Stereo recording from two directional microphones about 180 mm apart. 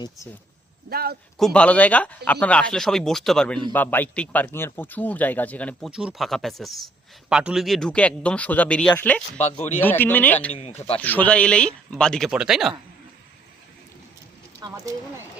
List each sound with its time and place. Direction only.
0.9 s a man's voice: 55° right (ahead or behind)
1.4 s speech: 5° left (ahead or behind)
5.9 s speech: 5° right (ahead or behind)
9.4 s speech: 35° left (ahead or behind)
9.8 s speech: 10° left (ahead or behind)
10.5 s speech: 35° left (ahead or behind)
11.0 s speech: 10° left (ahead or behind)
14.6 s speech: 20° right (ahead or behind)